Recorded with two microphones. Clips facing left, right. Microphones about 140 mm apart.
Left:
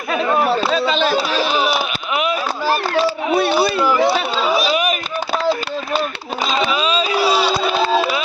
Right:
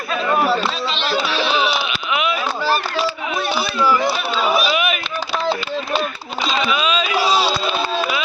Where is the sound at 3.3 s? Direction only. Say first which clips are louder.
Left 9 dB; 75° left (ahead or behind).